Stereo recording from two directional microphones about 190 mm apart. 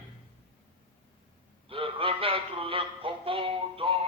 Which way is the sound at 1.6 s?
30° right (ahead or behind).